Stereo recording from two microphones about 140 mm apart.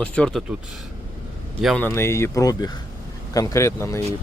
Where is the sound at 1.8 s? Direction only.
15° left (ahead or behind).